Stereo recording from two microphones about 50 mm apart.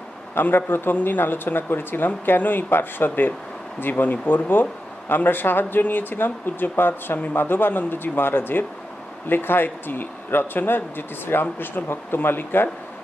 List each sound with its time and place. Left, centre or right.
0.3 s speech: left